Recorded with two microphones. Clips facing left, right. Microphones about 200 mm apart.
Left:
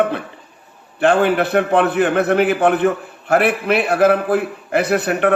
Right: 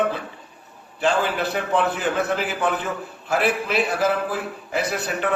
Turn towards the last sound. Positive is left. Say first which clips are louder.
# left 8 dB
turn(degrees=65)  # may be behind; listen again after turning